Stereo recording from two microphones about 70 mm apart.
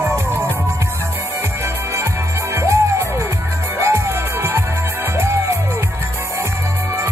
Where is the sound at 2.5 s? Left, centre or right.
Right.